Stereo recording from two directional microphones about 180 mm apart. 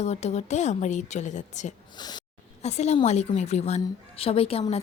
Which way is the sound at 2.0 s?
25° left (ahead or behind).